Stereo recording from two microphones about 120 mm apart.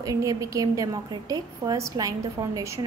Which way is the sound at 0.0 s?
30° right (ahead or behind).